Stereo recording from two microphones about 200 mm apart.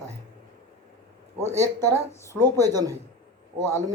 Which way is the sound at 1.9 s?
15° left (ahead or behind).